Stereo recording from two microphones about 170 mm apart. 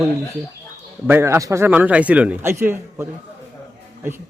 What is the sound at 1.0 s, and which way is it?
A man's voice, 15° right (ahead or behind).